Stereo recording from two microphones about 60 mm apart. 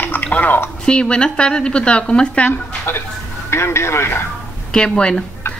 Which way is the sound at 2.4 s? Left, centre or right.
Left.